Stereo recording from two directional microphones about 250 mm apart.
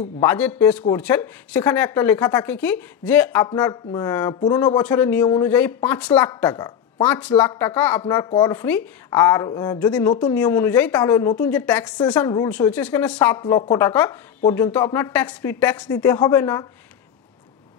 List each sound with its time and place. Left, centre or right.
0.2 s a woman's voice: centre
9.9 s a woman's voice: centre